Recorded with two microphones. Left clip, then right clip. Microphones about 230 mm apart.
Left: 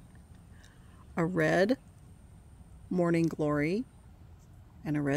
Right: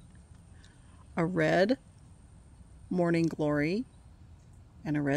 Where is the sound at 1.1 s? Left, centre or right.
Centre.